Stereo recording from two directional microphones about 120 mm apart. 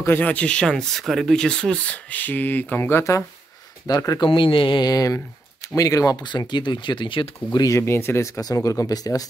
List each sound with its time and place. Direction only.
0.0 s speech: 15° left (ahead or behind); by 4.3 s 30° left (ahead or behind)
4.3 s speech: 45° left (ahead or behind)
7.5 s speech: 30° left (ahead or behind)